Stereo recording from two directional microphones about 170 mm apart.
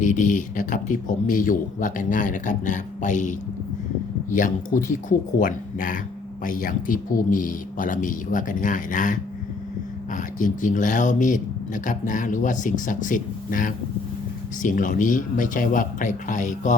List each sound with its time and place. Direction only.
0.0 s speech: 50° left (ahead or behind)